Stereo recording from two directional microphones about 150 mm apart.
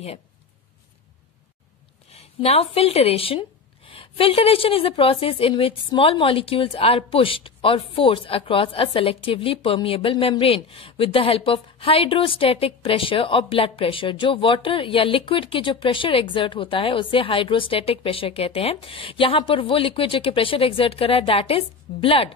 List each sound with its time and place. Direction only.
2.1 s a woman's voice: 40° left (ahead or behind)